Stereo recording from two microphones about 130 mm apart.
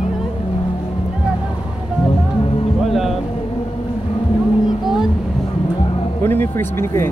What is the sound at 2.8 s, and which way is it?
Music, centre (ahead or behind).